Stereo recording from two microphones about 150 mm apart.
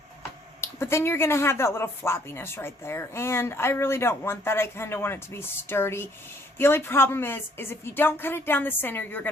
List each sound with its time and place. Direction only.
0.6 s speech: 15° left (ahead or behind)